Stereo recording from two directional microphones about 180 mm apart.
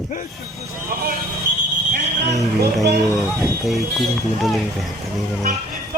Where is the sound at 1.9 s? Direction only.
65° right (ahead or behind).